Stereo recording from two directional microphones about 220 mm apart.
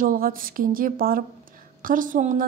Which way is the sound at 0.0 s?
40° right (ahead or behind).